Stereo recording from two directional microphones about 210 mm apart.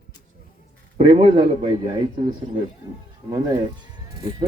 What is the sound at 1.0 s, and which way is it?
Speech, 20° right (ahead or behind).